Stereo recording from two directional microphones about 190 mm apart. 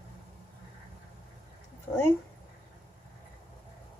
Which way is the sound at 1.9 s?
20° left (ahead or behind).